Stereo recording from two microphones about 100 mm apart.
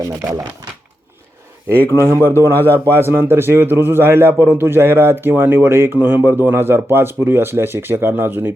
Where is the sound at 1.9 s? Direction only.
25° right (ahead or behind).